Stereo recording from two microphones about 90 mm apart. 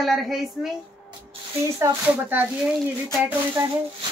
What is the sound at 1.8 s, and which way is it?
Speech, 35° right (ahead or behind).